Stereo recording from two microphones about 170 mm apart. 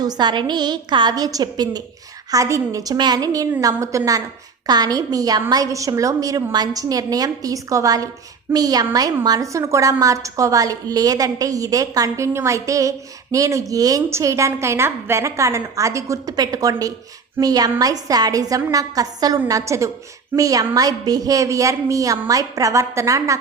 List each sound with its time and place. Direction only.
0.0 s a woman's voice: 25° right (ahead or behind)